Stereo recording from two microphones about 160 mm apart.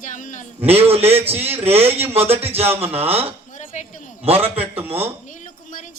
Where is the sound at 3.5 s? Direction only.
50° left (ahead or behind).